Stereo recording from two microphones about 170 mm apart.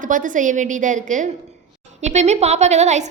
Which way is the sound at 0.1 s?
50° right (ahead or behind).